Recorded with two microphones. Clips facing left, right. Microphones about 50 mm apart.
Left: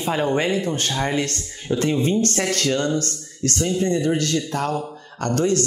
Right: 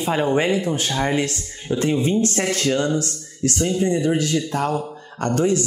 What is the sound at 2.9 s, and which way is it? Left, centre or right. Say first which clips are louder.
Speech: right 1 dB; left.